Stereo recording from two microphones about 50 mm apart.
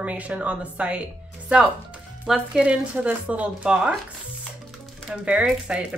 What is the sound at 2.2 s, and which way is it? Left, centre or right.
Speech, centre.